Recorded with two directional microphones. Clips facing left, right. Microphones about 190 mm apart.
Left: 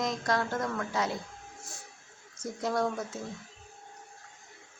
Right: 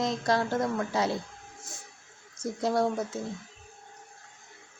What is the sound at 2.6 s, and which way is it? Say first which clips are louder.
Speech: right 3 dB; 30° right (ahead or behind).